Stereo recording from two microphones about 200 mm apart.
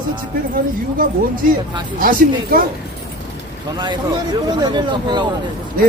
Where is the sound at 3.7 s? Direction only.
20° right (ahead or behind).